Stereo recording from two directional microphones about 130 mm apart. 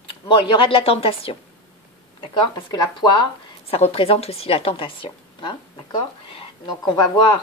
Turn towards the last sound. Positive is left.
turn(degrees=35)  # may be behind; listen again after turning